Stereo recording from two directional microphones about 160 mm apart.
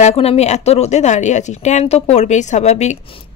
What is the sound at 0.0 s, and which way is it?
Speech, 40° left (ahead or behind).